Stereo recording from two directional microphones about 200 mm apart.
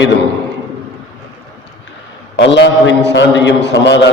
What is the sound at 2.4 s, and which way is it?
A man's voice, 60° left (ahead or behind).